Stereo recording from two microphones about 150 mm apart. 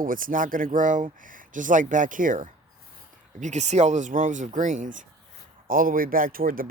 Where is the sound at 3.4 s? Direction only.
50° right (ahead or behind).